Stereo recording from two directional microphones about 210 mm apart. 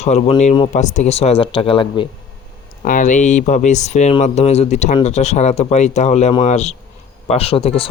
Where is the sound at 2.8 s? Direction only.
40° left (ahead or behind).